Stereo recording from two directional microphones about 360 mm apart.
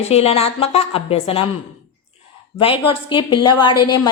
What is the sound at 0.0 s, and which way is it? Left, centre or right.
A woman's voice, centre.